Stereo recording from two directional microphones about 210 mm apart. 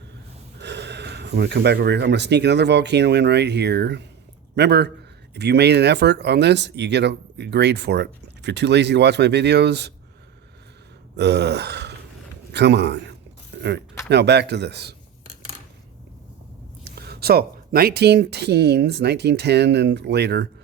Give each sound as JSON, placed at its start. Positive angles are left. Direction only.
{"t": 0.6, "sound": "speech", "side_deg": -55}
{"t": 11.2, "sound": "a man's voice", "side_deg": -55}
{"t": 16.8, "sound": "speech", "side_deg": -50}